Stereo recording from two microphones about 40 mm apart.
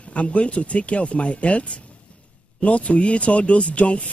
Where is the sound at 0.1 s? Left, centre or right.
Left.